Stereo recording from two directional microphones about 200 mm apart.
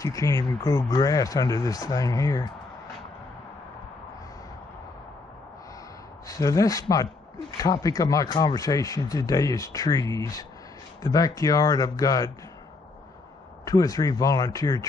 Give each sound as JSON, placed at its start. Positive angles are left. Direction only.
{"t": 0.0, "sound": "speech", "side_deg": 15}
{"t": 6.2, "sound": "speech", "side_deg": 15}
{"t": 13.7, "sound": "speech", "side_deg": 20}